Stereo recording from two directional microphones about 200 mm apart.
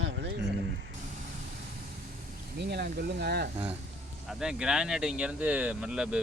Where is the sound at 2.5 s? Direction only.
55° right (ahead or behind).